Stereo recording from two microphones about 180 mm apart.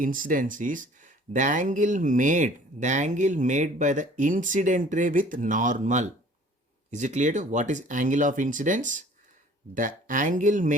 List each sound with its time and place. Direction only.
0.0 s speech: 50° right (ahead or behind)